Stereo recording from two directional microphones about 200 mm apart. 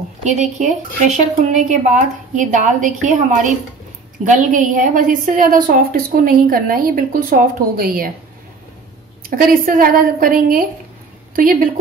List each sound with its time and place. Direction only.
0.2 s a woman's voice: 35° right (ahead or behind)
9.2 s a woman's voice: 45° right (ahead or behind)